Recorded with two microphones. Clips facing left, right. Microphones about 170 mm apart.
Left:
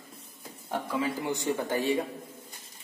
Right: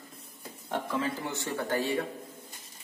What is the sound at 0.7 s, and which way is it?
A man's voice, 10° left (ahead or behind).